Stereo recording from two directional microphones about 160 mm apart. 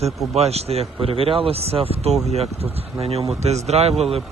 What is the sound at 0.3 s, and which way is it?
Speech, 40° right (ahead or behind).